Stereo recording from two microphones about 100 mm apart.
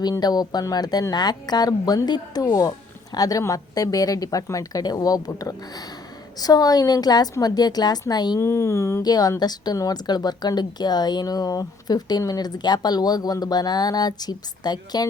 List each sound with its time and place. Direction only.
0.0 s speech: 40° left (ahead or behind)
8.4 s speech: 30° left (ahead or behind)
9.0 s speech: 40° left (ahead or behind)